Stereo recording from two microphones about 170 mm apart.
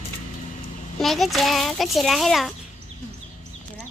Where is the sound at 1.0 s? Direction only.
Centre (ahead or behind).